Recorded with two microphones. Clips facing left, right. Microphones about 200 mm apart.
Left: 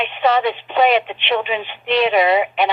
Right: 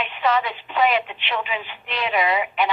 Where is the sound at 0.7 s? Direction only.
70° left (ahead or behind).